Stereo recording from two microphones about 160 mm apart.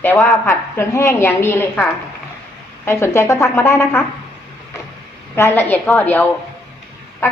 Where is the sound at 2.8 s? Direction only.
15° left (ahead or behind).